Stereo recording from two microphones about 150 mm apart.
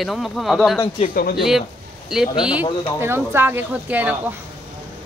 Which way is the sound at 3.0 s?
15° right (ahead or behind).